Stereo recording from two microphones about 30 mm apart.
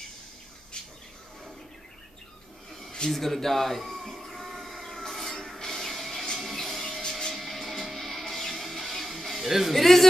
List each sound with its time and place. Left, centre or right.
3.1 s a man's voice: centre
4.0 s a sound: centre
5.9 s music: centre
7.0 s music: centre
7.3 s music: centre
9.5 s speech: centre
9.8 s speech: centre